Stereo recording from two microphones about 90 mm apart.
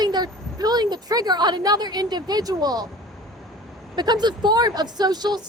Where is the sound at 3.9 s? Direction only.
50° right (ahead or behind).